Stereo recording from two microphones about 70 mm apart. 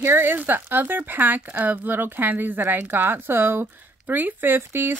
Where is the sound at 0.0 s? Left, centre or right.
Right.